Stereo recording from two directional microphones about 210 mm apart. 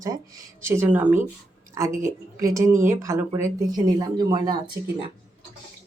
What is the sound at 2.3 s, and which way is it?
Speech, 15° right (ahead or behind).